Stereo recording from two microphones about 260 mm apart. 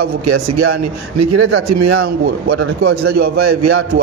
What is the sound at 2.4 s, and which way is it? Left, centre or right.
A man's voice, right.